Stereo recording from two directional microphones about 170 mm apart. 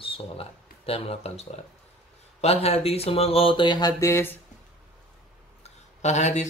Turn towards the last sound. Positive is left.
turn(degrees=45)  # may be behind; listen again after turning